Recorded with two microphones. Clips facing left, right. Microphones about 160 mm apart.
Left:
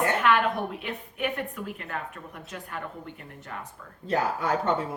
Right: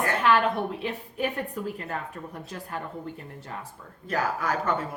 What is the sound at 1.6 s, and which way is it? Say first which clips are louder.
Speech: right 4 dB; 30° right (ahead or behind).